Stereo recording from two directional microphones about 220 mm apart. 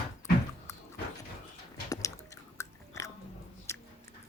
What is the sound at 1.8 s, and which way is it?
Chewing, 15° left (ahead or behind).